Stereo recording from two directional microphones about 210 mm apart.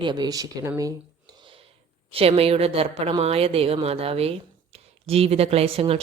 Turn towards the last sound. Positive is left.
turn(degrees=-25)  # may be behind; listen again after turning